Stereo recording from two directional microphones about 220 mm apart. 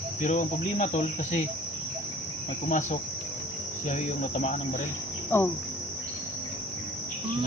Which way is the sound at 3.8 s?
35° left (ahead or behind).